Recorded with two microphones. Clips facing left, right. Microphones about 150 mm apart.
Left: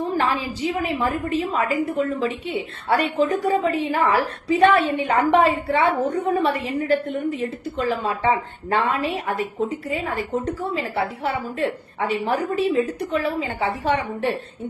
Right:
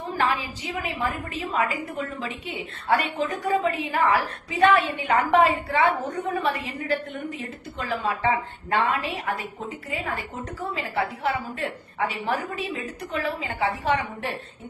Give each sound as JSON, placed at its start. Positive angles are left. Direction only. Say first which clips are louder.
{"t": 0.2, "sound": "a woman's voice", "louder": "left 3 dB", "side_deg": 35}
{"t": 10.9, "sound": "a woman's voice", "louder": "left 2 dB", "side_deg": 30}